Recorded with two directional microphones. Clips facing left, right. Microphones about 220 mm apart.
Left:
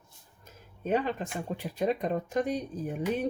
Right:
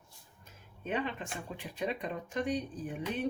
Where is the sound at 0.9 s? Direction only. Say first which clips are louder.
Left 6 dB; 40° left (ahead or behind).